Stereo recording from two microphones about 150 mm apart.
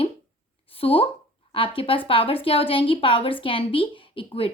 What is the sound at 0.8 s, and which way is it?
A woman's voice, 40° left (ahead or behind).